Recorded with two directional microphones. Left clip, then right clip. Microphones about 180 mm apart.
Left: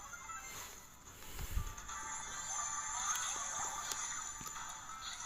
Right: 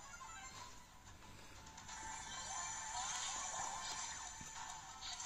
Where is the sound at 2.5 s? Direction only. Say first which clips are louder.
Left 5 dB; 50° right (ahead or behind).